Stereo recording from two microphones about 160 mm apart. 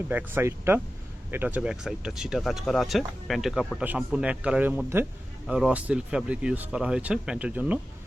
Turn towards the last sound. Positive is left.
turn(degrees=-10)  # may be behind; listen again after turning